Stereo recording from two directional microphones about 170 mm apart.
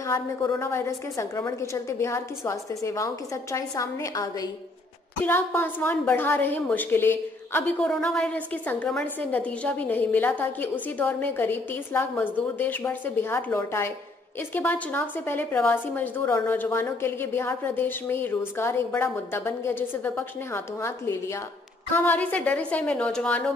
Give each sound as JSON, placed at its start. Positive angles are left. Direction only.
{"t": 0.0, "sound": "a woman's voice", "side_deg": 15}